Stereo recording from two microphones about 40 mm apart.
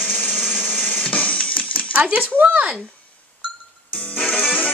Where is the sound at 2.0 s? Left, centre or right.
Right.